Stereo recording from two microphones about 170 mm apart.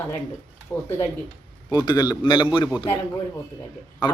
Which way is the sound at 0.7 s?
15° left (ahead or behind).